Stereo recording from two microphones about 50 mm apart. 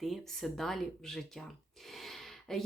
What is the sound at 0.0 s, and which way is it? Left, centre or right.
Speech, centre.